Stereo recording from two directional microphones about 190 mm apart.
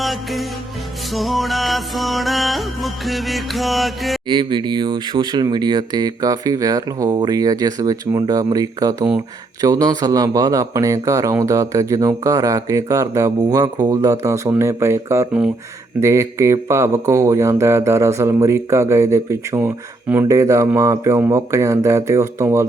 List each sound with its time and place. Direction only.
0.0 s music: centre (ahead or behind)
4.3 s speech: 25° right (ahead or behind)